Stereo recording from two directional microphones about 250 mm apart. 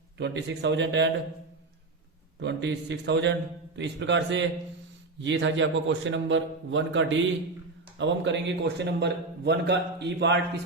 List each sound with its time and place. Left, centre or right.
0.2 s a man's voice: right
2.4 s a man's voice: right